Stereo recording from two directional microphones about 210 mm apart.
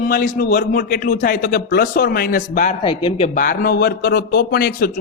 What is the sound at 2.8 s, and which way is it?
A man's voice, 25° left (ahead or behind).